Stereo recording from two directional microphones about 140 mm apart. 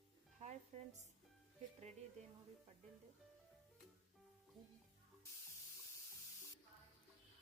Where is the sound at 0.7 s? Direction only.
50° right (ahead or behind).